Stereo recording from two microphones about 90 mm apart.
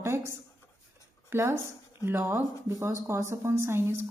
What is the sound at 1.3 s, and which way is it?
A woman's voice, 30° right (ahead or behind).